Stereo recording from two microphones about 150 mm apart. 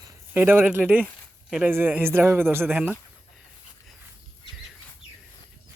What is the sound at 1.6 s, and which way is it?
Speech, 15° right (ahead or behind).